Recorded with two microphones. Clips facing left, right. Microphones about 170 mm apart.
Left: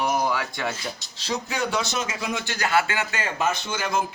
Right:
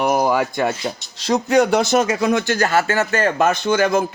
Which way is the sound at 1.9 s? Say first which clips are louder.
Right 12 dB; 60° right (ahead or behind).